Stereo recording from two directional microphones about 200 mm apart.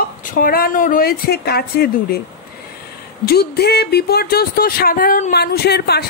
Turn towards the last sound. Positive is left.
turn(degrees=55)  # may be behind; listen again after turning